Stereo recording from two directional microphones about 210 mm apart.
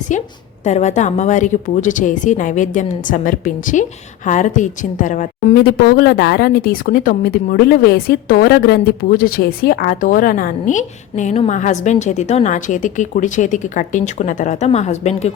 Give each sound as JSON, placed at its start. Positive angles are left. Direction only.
{"t": 0.6, "sound": "a woman's voice", "side_deg": 35}